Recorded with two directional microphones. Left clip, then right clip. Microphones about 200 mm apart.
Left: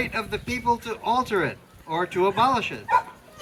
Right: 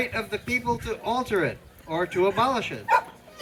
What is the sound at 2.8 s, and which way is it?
Dog, 35° right (ahead or behind).